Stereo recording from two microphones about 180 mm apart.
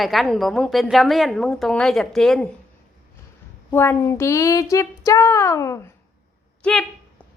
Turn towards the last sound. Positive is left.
turn(degrees=5)  # may be behind; listen again after turning